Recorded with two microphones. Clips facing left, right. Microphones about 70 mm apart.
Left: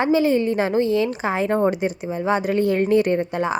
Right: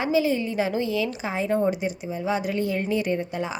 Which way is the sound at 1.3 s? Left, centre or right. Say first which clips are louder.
Left 3 dB; left.